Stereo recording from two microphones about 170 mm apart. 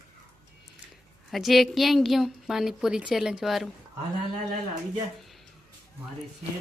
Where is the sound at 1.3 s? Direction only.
Centre (ahead or behind).